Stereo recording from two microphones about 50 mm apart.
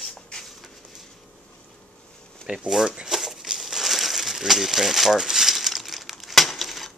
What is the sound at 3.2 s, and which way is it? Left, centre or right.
Crumpling, centre.